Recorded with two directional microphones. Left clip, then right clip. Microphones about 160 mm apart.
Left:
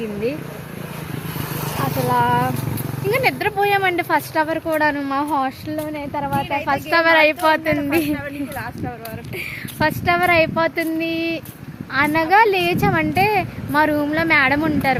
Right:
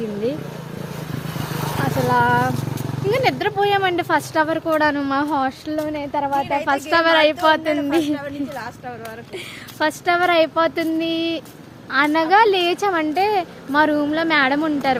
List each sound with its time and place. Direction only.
1.5 s vehicle: 75° right (ahead or behind)
2.0 s a woman's voice: 5° right (ahead or behind)
6.4 s a woman's voice: 25° right (ahead or behind)
6.7 s a woman's voice: centre (ahead or behind)
9.7 s a woman's voice: centre (ahead or behind)